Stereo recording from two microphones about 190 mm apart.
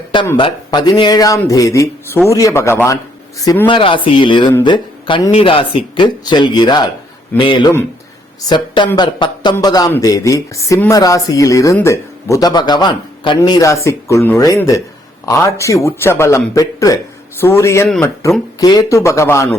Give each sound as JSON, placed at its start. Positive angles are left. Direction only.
{"t": 0.3, "sound": "speech", "side_deg": 25}
{"t": 17.8, "sound": "speech", "side_deg": 0}
{"t": 18.6, "sound": "speech", "side_deg": 20}